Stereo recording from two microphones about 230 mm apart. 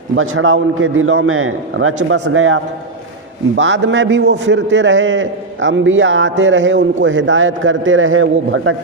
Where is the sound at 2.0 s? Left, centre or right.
Right.